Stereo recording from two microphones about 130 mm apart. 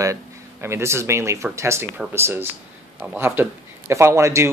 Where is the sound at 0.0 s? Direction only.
20° right (ahead or behind).